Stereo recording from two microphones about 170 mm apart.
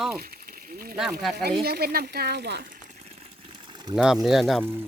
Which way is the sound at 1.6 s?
65° right (ahead or behind).